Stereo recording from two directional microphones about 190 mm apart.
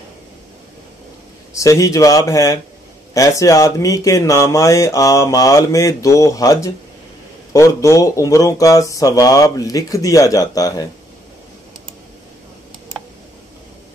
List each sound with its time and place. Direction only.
1.5 s speech: 15° left (ahead or behind)